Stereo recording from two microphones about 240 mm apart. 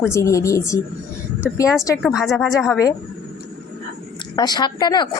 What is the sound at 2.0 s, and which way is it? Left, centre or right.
Speech, centre.